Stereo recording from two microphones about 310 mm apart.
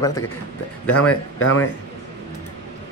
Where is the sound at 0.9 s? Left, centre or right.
Left.